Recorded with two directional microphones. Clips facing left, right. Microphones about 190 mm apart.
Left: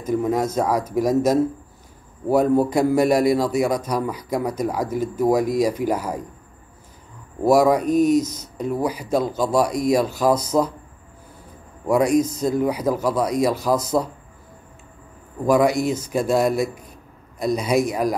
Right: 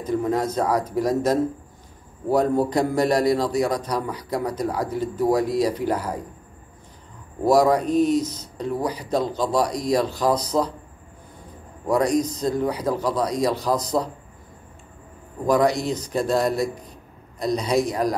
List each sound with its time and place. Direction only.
0.1 s a man's voice: 10° left (ahead or behind)
7.4 s a man's voice: 10° left (ahead or behind)
8.2 s speech: 45° left (ahead or behind)
8.5 s a man's voice: 10° left (ahead or behind)
11.9 s a man's voice: 10° left (ahead or behind)
15.4 s a man's voice: 10° left (ahead or behind)